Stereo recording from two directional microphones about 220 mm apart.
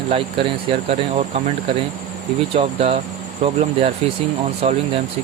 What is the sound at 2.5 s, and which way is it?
Speech, 25° right (ahead or behind).